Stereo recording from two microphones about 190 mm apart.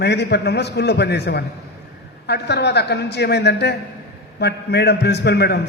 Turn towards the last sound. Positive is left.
turn(degrees=60)  # may be behind; listen again after turning